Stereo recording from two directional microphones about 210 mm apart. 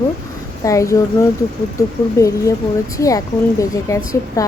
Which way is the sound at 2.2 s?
15° left (ahead or behind).